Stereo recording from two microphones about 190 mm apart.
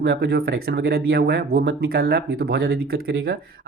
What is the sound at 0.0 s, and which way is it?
Speech, 60° right (ahead or behind).